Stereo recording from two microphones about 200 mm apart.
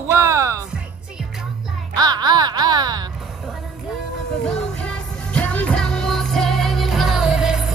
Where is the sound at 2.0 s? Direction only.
20° right (ahead or behind).